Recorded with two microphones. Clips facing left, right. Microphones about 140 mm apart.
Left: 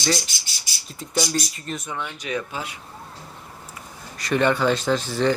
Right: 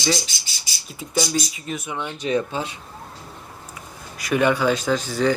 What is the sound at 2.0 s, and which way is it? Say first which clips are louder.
Speech: right 9 dB; 25° right (ahead or behind).